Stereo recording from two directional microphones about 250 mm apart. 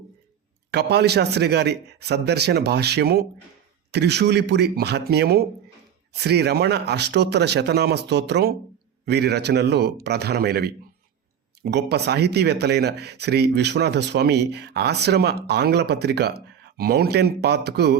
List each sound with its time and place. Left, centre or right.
0.7 s speech: right